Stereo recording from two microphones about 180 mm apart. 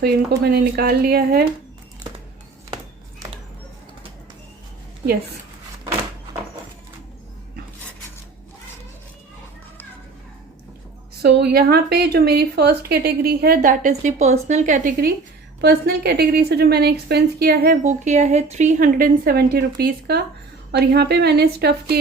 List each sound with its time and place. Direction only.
0.0 s a woman's voice: 60° right (ahead or behind)
5.0 s speech: 30° right (ahead or behind)
11.2 s a woman's voice: 65° right (ahead or behind); by 15.1 s 45° right (ahead or behind)
15.6 s a woman's voice: 60° right (ahead or behind)